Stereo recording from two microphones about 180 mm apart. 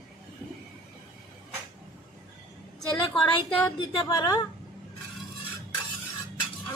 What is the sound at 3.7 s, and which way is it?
Speech, 20° left (ahead or behind).